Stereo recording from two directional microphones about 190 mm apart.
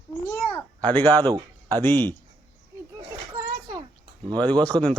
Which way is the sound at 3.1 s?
20° right (ahead or behind).